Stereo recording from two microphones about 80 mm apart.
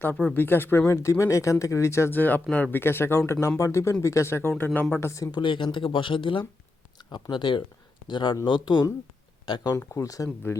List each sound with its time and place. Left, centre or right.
0.0 s speech: left
2.1 s speech: left
4.9 s speech: left
5.3 s speech: left
7.1 s speech: left
9.9 s speech: left
10.5 s speech: left